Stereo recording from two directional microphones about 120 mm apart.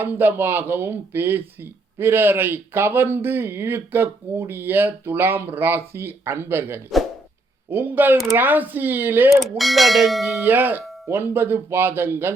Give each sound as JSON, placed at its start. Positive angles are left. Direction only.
{"t": 0.0, "sound": "speech", "side_deg": -15}
{"t": 9.3, "sound": "speech", "side_deg": 0}
{"t": 10.3, "sound": "speech", "side_deg": -15}